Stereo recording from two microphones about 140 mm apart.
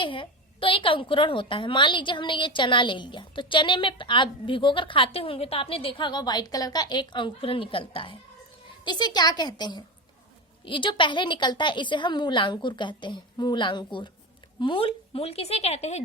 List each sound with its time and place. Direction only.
0.0 s a woman's voice: 40° left (ahead or behind)